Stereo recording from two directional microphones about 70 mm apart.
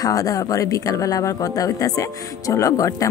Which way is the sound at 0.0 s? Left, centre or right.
Left.